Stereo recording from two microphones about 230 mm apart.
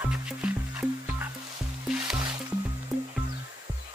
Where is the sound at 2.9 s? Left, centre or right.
Centre.